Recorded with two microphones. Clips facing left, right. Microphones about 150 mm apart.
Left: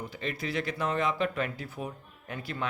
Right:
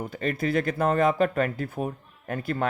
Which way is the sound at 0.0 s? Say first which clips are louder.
Right 7 dB; 50° right (ahead or behind).